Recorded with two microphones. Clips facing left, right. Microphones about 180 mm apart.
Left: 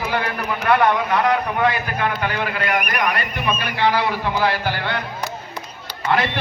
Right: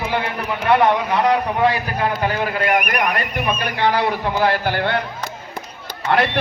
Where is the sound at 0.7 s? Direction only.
25° right (ahead or behind); by 5.0 s 55° right (ahead or behind).